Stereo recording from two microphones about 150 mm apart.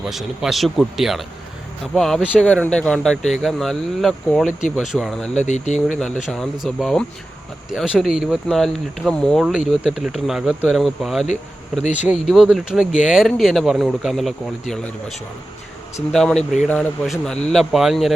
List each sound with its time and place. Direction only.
0.0 s speech: centre (ahead or behind)
5.5 s speech: 50° left (ahead or behind)
6.3 s speech: centre (ahead or behind)
11.8 s speech: 50° left (ahead or behind)
12.0 s speech: centre (ahead or behind)
16.1 s speech: 5° left (ahead or behind)